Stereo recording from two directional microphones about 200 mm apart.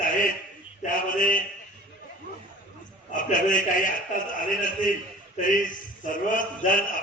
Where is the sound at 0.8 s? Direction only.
45° left (ahead or behind).